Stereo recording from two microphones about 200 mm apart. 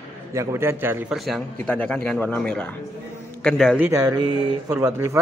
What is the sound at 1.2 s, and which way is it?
A man's voice, 5° left (ahead or behind).